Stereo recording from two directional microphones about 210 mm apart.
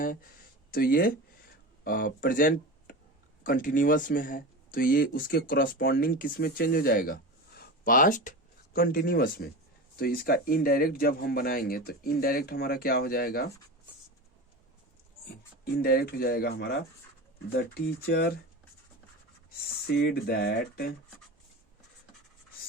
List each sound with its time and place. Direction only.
0.7 s speech: 45° left (ahead or behind)
15.8 s speech: 45° left (ahead or behind)
19.9 s speech: 50° left (ahead or behind)